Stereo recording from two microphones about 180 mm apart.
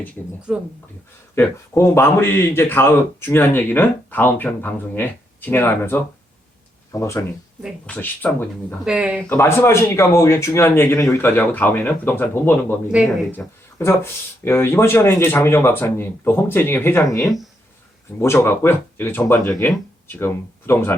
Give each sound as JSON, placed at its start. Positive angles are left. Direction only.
{"t": 0.5, "sound": "speech", "side_deg": -5}
{"t": 1.4, "sound": "speech", "side_deg": 15}
{"t": 8.8, "sound": "speech", "side_deg": -5}
{"t": 9.3, "sound": "speech", "side_deg": 15}